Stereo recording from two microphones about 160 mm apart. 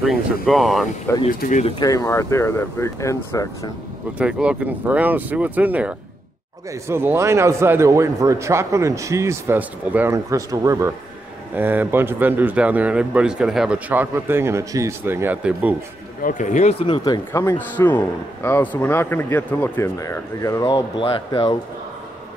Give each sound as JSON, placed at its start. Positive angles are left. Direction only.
{"t": 0.0, "sound": "speech", "side_deg": 0}
{"t": 1.1, "sound": "a man's voice", "side_deg": 15}
{"t": 4.2, "sound": "a man's voice", "side_deg": -5}
{"t": 16.2, "sound": "speech", "side_deg": 55}
{"t": 16.8, "sound": "a man's voice", "side_deg": 30}
{"t": 21.0, "sound": "speech", "side_deg": 35}